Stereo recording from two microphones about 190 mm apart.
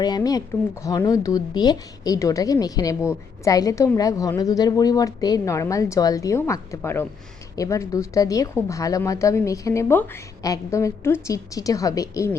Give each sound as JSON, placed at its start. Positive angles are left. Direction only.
{"t": 0.0, "sound": "a woman's voice", "side_deg": 20}